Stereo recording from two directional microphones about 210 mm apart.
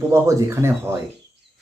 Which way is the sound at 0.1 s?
15° right (ahead or behind).